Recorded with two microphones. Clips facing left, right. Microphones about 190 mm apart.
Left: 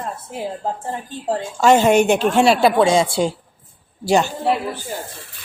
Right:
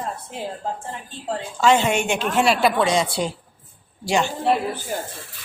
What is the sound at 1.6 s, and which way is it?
A woman's voice, 45° left (ahead or behind).